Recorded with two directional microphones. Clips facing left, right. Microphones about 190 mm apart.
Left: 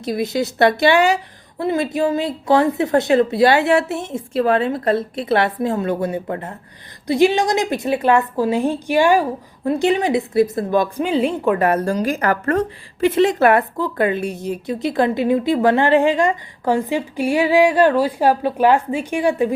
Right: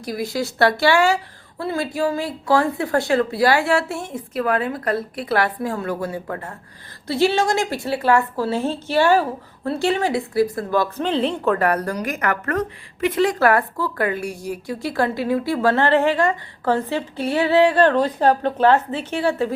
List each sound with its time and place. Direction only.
0.0 s a woman's voice: 20° left (ahead or behind)